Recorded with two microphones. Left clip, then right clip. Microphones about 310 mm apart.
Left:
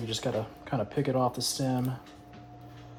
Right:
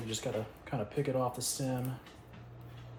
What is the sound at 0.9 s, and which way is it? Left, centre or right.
Speech, left.